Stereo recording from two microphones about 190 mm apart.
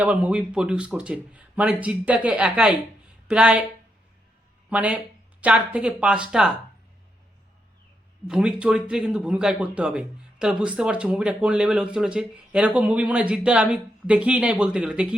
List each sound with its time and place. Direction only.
0.0 s speech: 5° right (ahead or behind)
4.7 s speech: 5° right (ahead or behind)
8.3 s speech: 5° right (ahead or behind)